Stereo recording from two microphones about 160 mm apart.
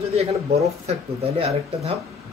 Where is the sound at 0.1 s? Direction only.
40° right (ahead or behind).